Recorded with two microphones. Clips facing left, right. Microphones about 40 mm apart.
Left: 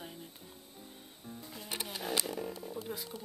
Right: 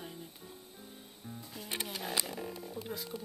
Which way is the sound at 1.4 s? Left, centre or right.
Centre.